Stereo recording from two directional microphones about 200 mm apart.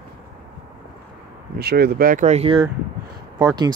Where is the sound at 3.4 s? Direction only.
20° right (ahead or behind).